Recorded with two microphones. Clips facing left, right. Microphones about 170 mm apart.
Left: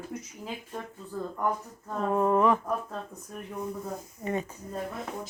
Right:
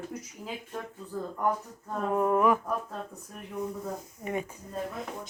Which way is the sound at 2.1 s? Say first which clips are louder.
Left 1 dB; 10° right (ahead or behind).